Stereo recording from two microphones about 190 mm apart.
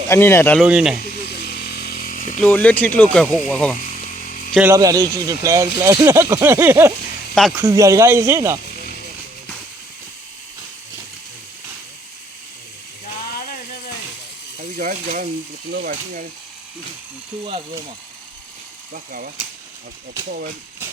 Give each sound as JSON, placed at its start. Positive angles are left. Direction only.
{"t": 0.1, "sound": "speech", "side_deg": 15}
{"t": 0.6, "sound": "speech", "side_deg": -5}
{"t": 1.0, "sound": "chainsaw", "side_deg": 55}
{"t": 2.4, "sound": "speech", "side_deg": 10}
{"t": 4.3, "sound": "a sound", "side_deg": 45}
{"t": 4.7, "sound": "speech", "side_deg": -15}
{"t": 14.6, "sound": "speech", "side_deg": -50}
{"t": 18.9, "sound": "speech", "side_deg": -50}